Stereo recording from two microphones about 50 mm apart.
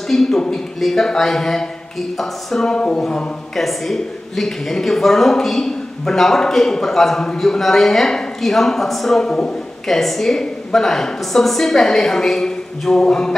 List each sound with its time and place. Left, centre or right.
0.1 s speech: centre
2.7 s speech: centre
3.5 s speech: centre